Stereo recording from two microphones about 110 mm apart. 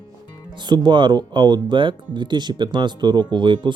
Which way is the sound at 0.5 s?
40° right (ahead or behind).